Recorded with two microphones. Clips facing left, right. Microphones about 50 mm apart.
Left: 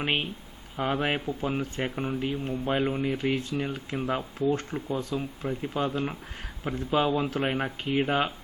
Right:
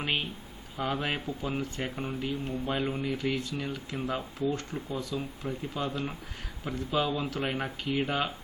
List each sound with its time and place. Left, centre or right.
0.0 s speech: left